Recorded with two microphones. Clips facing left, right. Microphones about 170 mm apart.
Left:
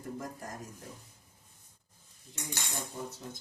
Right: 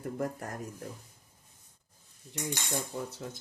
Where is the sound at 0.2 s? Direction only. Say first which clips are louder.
Right 8 dB; 60° right (ahead or behind).